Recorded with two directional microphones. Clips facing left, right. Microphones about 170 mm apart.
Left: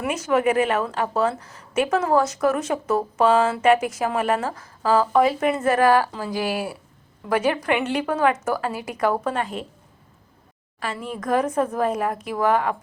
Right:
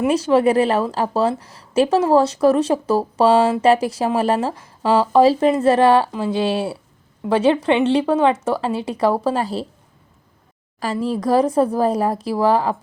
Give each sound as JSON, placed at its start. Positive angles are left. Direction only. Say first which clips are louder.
{"t": 0.0, "sound": "a woman's voice", "louder": "right 6 dB", "side_deg": -30}
{"t": 10.9, "sound": "a woman's voice", "louder": "right 6 dB", "side_deg": -35}